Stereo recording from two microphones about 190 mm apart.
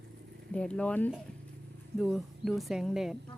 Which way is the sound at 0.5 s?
5° left (ahead or behind).